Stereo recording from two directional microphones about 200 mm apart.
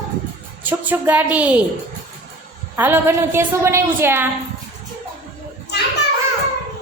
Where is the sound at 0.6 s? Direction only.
10° right (ahead or behind).